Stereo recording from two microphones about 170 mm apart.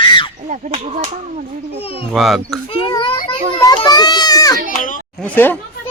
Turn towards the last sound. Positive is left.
turn(degrees=10)  # may be behind; listen again after turning